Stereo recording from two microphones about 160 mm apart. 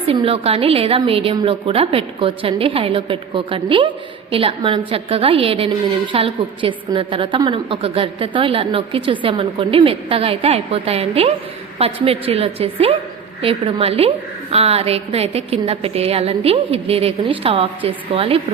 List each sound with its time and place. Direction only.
0.0 s a woman's voice: 35° right (ahead or behind)